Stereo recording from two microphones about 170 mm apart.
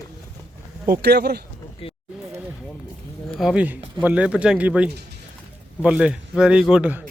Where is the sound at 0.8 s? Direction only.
65° right (ahead or behind).